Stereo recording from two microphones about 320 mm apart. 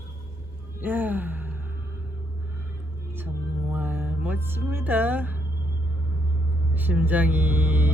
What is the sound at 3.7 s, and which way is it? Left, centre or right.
Speech, centre.